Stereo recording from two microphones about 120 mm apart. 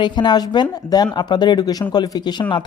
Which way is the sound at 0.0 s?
35° left (ahead or behind).